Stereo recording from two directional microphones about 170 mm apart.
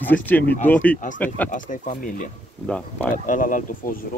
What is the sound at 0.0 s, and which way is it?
Speech, 10° left (ahead or behind).